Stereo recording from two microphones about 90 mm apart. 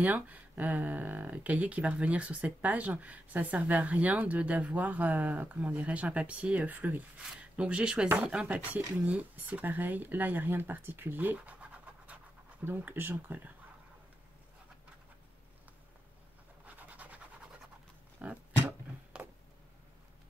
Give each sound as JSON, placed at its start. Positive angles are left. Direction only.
{"t": 0.0, "sound": "speech", "side_deg": -15}
{"t": 16.6, "sound": "scratch", "side_deg": -15}
{"t": 18.2, "sound": "speech", "side_deg": -15}
{"t": 19.2, "sound": "a sound", "side_deg": -25}